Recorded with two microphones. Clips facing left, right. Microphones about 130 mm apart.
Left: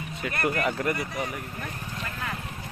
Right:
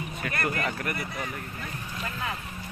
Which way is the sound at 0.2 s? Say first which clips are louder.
Left 3 dB; 20° left (ahead or behind).